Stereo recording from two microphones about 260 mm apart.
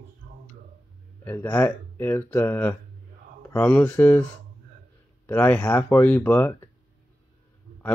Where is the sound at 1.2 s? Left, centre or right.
Centre.